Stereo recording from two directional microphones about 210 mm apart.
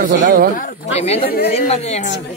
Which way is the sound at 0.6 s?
30° left (ahead or behind).